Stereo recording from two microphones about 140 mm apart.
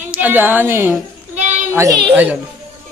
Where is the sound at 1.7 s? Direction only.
20° right (ahead or behind).